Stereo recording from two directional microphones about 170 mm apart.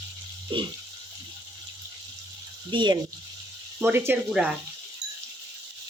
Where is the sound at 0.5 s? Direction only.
30° right (ahead or behind).